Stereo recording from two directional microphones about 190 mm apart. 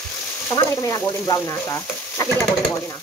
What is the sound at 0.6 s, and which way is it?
Frying, 15° left (ahead or behind).